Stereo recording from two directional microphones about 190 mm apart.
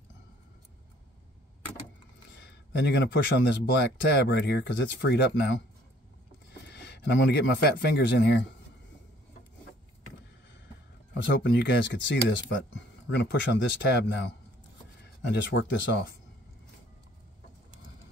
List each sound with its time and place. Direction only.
2.3 s speech: 65° left (ahead or behind)
6.7 s a man's voice: 65° left (ahead or behind)
11.1 s speech: 65° left (ahead or behind)